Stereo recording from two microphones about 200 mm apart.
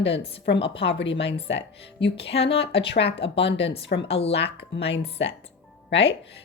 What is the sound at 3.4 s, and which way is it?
Speech, 60° left (ahead or behind).